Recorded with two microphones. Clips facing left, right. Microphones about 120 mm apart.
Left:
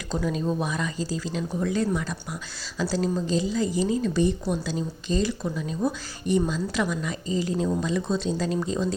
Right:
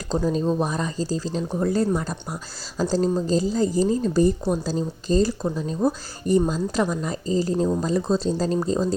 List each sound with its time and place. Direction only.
0.1 s a woman's voice: 30° right (ahead or behind)